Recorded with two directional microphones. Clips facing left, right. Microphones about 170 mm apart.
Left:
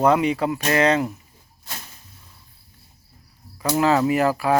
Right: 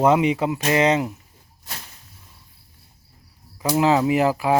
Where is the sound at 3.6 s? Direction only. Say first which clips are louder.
Even; 15° right (ahead or behind).